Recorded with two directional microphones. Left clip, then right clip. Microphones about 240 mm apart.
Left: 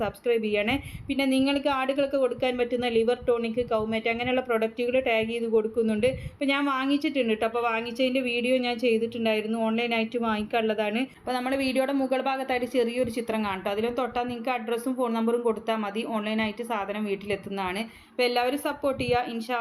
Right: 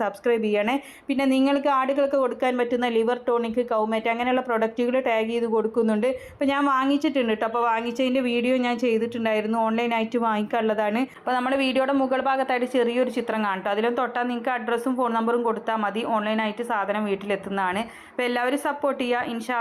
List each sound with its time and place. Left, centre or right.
0.0 s a woman's voice: centre
11.3 s a woman's voice: centre